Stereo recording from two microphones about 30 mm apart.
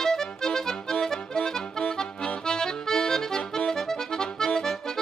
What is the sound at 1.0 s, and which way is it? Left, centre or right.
Music, left.